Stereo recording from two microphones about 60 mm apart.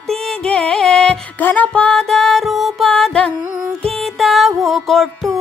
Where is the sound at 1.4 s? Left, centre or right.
Left.